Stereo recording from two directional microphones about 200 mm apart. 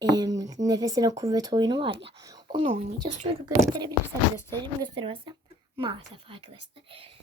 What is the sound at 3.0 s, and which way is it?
Speech, 20° right (ahead or behind).